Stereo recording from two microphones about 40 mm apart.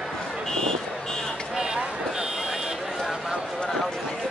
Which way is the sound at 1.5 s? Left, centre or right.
Centre.